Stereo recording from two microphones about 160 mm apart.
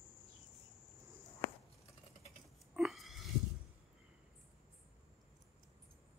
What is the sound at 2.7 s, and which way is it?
Pig, centre (ahead or behind).